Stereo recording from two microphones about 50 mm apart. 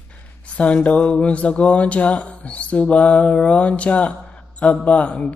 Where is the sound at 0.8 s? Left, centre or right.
Left.